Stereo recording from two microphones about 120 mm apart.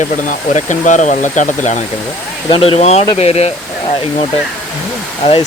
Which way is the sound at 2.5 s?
50° left (ahead or behind).